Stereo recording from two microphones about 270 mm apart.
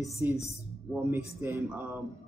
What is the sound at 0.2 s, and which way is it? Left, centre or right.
Speech, centre.